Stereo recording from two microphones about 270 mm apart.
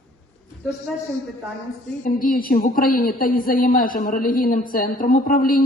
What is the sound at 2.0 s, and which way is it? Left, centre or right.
Speech, left.